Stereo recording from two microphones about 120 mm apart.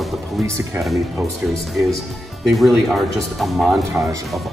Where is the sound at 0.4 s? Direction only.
Centre (ahead or behind).